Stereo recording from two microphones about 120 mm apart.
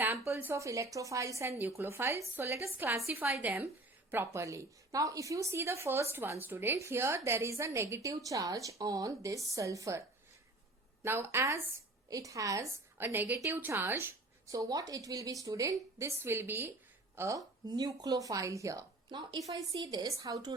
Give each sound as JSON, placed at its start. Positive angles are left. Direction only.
{"t": 0.0, "sound": "a woman's voice", "side_deg": -20}
{"t": 11.0, "sound": "a woman's voice", "side_deg": -20}